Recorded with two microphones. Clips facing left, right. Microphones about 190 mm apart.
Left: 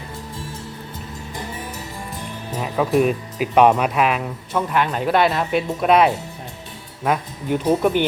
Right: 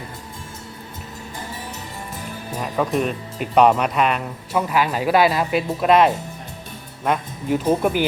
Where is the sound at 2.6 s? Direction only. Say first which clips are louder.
Left 4 dB; 5° left (ahead or behind).